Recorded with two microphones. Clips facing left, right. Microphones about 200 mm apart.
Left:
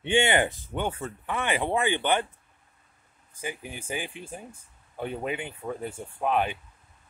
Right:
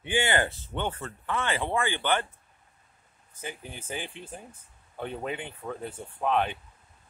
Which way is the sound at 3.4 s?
10° left (ahead or behind).